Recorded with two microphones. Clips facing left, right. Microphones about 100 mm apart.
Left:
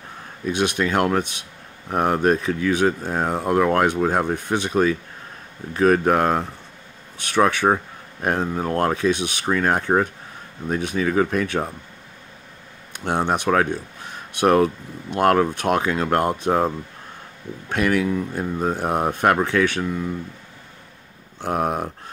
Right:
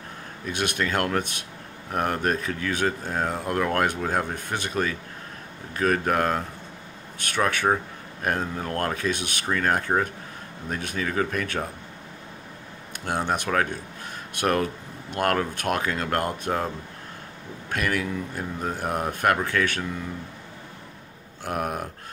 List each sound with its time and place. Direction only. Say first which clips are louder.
0.5 s speech: left 5 dB; 20° left (ahead or behind)
12.9 s speech: left 5 dB; 20° left (ahead or behind)
21.4 s speech: left 6 dB; 25° left (ahead or behind)